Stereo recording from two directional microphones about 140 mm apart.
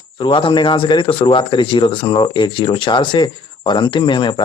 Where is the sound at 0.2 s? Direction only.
35° left (ahead or behind).